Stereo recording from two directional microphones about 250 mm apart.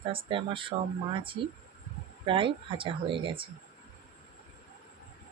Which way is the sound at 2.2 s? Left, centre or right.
Centre.